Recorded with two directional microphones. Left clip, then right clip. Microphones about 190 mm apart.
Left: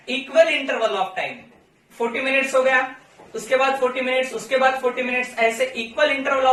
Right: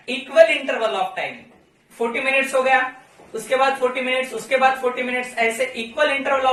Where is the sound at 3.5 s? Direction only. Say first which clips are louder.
Even; 20° right (ahead or behind).